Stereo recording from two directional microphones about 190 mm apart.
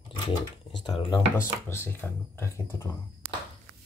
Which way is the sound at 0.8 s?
25° left (ahead or behind).